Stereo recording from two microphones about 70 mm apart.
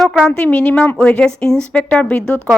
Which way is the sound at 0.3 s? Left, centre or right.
Centre.